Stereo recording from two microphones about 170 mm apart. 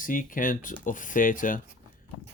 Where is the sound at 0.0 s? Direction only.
50° left (ahead or behind).